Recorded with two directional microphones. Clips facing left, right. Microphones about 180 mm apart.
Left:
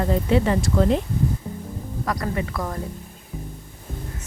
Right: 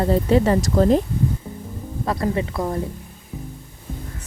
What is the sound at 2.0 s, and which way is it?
Speech, 25° right (ahead or behind).